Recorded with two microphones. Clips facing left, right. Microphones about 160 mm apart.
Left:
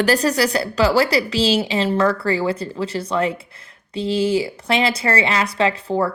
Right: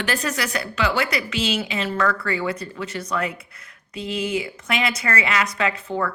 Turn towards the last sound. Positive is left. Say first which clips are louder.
# left 5 dB
turn(degrees=30)  # may be behind; listen again after turning